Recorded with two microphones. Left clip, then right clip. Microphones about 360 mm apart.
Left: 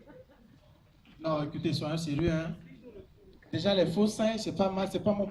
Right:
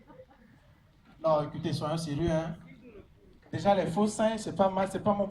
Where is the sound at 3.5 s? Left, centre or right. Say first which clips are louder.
Right 1 dB; centre.